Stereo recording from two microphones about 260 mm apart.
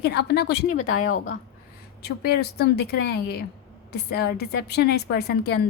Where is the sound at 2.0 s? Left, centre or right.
Left.